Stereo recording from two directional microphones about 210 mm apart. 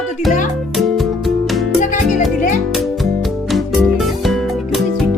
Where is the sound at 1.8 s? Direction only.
40° left (ahead or behind).